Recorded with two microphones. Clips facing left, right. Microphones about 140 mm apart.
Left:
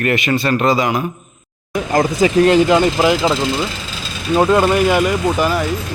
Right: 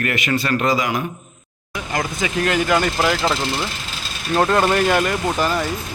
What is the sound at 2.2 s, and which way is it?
Speech, 30° left (ahead or behind).